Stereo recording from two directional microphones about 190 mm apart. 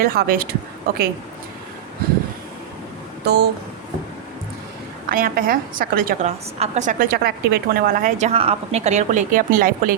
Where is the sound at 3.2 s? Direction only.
60° right (ahead or behind).